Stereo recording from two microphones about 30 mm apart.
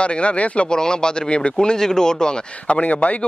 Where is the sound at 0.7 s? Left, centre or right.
Left.